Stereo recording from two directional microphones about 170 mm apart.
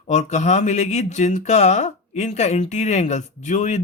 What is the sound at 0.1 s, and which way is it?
Speech, 45° left (ahead or behind).